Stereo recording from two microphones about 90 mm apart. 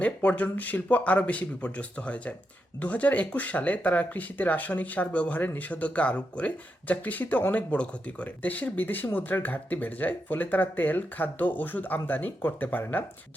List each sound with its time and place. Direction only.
0.0 s speech: 15° left (ahead or behind)